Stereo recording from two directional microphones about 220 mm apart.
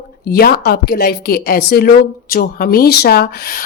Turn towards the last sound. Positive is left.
turn(degrees=45)  # may be behind; listen again after turning